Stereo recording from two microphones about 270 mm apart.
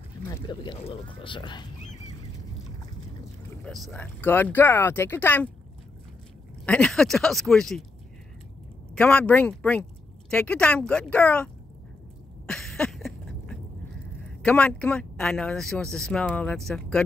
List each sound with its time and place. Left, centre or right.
0.3 s speech: centre
3.6 s speech: centre
6.6 s speech: centre
8.9 s speech: centre
12.4 s a sound: centre
14.4 s speech: centre